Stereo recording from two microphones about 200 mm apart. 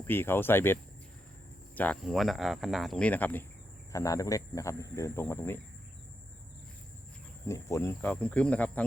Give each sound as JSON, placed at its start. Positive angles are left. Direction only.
{"t": 0.1, "sound": "speech", "side_deg": 10}
{"t": 7.4, "sound": "speech", "side_deg": 15}